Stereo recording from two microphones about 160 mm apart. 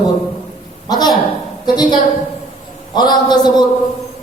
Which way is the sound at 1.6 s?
25° left (ahead or behind).